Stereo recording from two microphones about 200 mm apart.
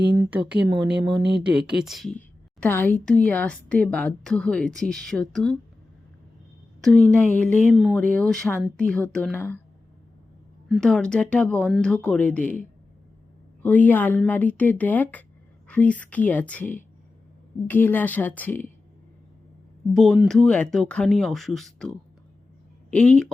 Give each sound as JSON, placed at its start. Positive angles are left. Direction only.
{"t": 0.2, "sound": "speech", "side_deg": -5}
{"t": 0.9, "sound": "speech", "side_deg": -55}
{"t": 1.4, "sound": "a woman's voice", "side_deg": -5}
{"t": 6.8, "sound": "a woman's voice", "side_deg": 5}
{"t": 10.7, "sound": "a woman's voice", "side_deg": 0}
{"t": 13.6, "sound": "speech", "side_deg": 10}
{"t": 19.9, "sound": "a woman's voice", "side_deg": 0}